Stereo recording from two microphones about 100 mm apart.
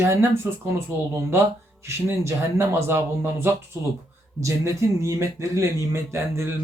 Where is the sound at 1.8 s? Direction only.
25° right (ahead or behind).